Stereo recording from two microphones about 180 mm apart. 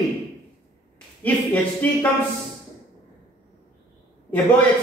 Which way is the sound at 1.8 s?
10° left (ahead or behind).